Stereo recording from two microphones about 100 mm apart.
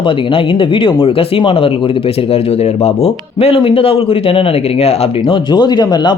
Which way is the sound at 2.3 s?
90° left.